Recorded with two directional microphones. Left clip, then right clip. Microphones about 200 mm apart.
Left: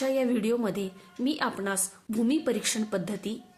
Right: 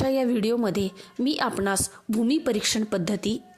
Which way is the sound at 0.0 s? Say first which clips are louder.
Right 3 dB; 45° right (ahead or behind).